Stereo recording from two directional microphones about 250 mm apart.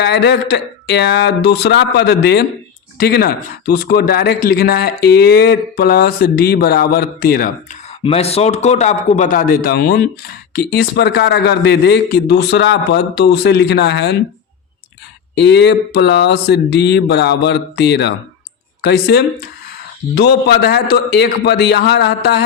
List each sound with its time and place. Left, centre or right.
0.0 s speech: left
8.0 s speech: left
15.4 s speech: left